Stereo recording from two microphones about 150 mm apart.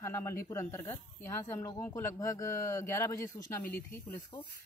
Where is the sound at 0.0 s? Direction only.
20° left (ahead or behind).